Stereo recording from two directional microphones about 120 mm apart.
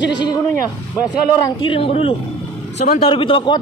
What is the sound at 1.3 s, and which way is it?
Speech, 40° left (ahead or behind).